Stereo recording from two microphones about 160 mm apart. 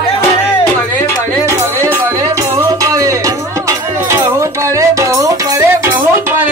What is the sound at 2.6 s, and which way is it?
Music, 20° right (ahead or behind).